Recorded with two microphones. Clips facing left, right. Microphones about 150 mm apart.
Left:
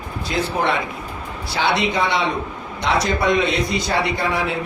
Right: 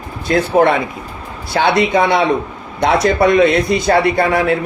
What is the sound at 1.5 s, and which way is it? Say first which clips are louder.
A man's voice: right 7 dB; 55° right (ahead or behind).